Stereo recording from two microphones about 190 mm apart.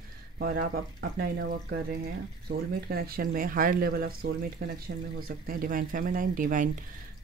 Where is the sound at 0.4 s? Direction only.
50° right (ahead or behind).